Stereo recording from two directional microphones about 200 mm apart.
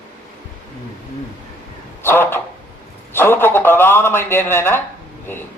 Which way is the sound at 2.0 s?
10° left (ahead or behind).